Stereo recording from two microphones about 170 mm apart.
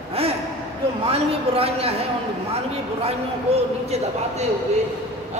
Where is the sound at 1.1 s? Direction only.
35° right (ahead or behind).